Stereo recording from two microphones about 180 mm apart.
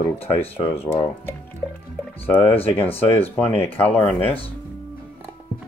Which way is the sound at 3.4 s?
35° left (ahead or behind).